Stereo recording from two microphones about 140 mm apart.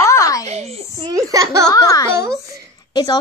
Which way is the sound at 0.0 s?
20° left (ahead or behind).